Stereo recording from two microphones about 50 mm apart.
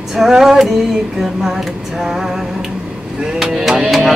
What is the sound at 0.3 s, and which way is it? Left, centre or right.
Music, centre.